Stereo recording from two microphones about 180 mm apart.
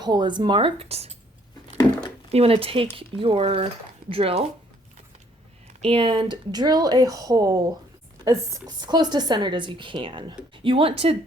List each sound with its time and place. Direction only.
0.0 s speech: 25° right (ahead or behind)
2.3 s speech: 35° right (ahead or behind)
5.8 s speech: 30° right (ahead or behind)